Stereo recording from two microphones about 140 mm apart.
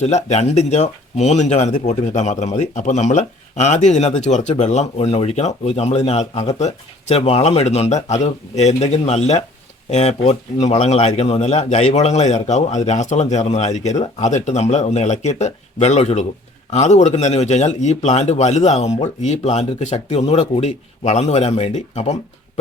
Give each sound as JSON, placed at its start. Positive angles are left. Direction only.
{"t": 0.0, "sound": "speech", "side_deg": 55}